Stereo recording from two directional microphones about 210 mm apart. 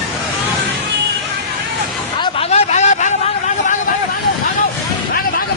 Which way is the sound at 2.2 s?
30° left (ahead or behind).